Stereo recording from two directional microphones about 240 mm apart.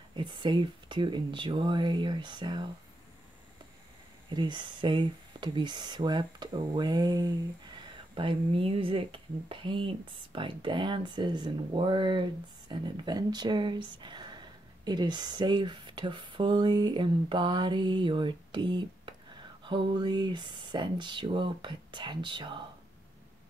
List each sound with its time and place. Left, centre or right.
0.1 s speech: centre
4.3 s speech: centre